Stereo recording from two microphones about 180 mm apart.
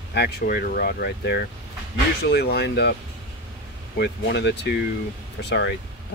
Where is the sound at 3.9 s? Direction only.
75° left (ahead or behind).